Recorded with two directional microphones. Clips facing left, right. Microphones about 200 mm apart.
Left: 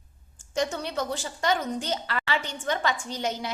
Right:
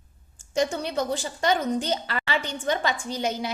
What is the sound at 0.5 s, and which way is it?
A woman's voice, 10° right (ahead or behind).